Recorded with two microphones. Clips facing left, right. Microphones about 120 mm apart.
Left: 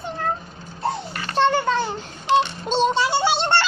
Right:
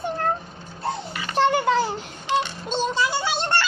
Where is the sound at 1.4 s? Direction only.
15° right (ahead or behind).